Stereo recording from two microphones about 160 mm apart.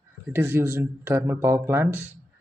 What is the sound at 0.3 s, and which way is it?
Speech, 15° right (ahead or behind).